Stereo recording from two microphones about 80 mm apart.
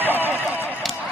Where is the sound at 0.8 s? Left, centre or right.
Centre.